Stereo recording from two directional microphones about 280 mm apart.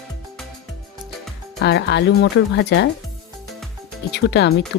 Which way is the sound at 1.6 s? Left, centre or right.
Left.